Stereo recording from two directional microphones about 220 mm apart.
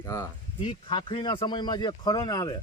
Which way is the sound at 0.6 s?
25° left (ahead or behind).